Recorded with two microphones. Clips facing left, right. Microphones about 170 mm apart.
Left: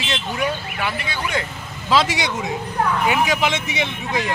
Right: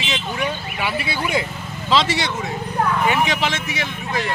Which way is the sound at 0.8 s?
10° right (ahead or behind).